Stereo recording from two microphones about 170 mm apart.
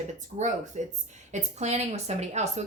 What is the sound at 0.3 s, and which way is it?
A woman's voice, 45° right (ahead or behind).